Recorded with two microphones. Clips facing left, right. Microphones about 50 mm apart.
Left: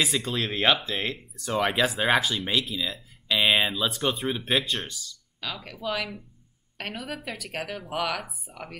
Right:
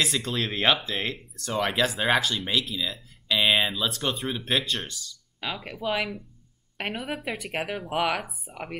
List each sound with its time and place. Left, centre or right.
0.0 s speech: centre
5.4 s speech: right